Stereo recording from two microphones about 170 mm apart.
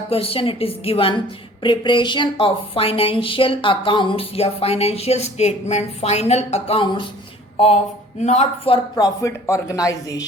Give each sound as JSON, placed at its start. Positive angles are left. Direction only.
{"t": 0.1, "sound": "speech", "side_deg": 35}
{"t": 8.2, "sound": "speech", "side_deg": 45}